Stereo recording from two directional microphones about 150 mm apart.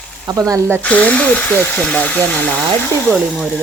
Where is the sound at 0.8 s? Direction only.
10° left (ahead or behind).